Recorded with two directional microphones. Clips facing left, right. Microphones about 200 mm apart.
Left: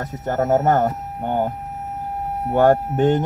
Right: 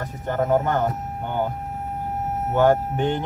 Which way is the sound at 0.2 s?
45° left (ahead or behind).